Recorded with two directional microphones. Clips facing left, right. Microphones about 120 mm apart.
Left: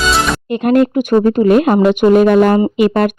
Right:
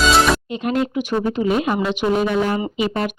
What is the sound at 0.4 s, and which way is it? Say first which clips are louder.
Speech: left 9 dB; 55° left (ahead or behind).